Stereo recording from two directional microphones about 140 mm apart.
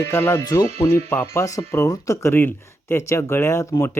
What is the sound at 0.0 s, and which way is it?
A man's voice, 15° left (ahead or behind).